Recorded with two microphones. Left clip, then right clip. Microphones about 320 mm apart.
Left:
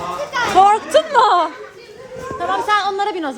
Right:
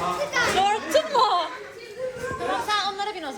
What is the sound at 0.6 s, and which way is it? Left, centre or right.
Music, left.